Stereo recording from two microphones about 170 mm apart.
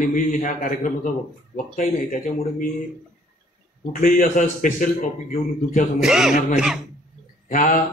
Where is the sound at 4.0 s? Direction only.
50° left (ahead or behind).